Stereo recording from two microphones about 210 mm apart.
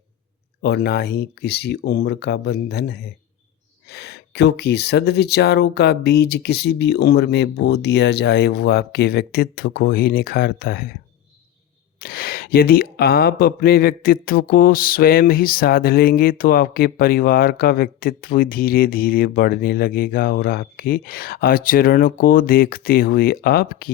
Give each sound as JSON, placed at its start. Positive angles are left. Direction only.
{"t": 0.6, "sound": "speech", "side_deg": 50}
{"t": 11.9, "sound": "speech", "side_deg": 45}